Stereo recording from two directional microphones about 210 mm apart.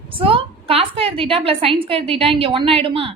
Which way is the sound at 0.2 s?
25° right (ahead or behind).